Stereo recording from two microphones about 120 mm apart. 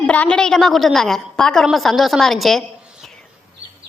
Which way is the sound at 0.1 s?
10° left (ahead or behind).